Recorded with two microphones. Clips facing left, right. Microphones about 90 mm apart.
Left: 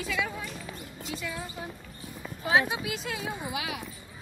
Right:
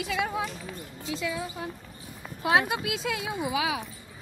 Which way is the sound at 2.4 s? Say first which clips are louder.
Right 1 dB; 65° right (ahead or behind).